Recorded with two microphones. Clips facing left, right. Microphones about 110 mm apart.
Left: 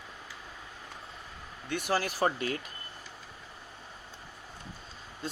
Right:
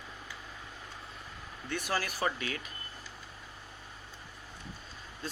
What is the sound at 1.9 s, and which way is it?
Speech, 25° left (ahead or behind).